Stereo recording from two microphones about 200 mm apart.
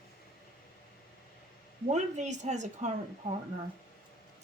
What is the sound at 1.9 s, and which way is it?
Speech, 35° right (ahead or behind).